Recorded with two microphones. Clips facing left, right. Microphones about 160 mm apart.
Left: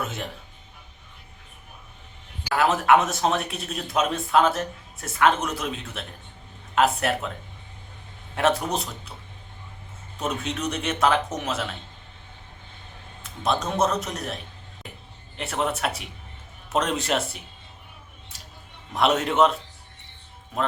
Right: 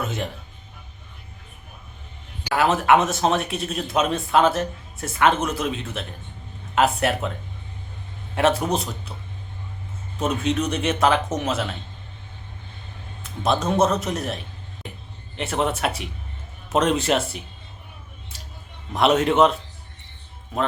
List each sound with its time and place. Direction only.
0.0 s speech: centre (ahead or behind)
2.4 s a man's voice: centre (ahead or behind)
8.4 s a man's voice: centre (ahead or behind)
10.2 s a man's voice: centre (ahead or behind)
13.2 s a man's voice: centre (ahead or behind)
15.4 s a man's voice: centre (ahead or behind)
18.9 s a man's voice: centre (ahead or behind)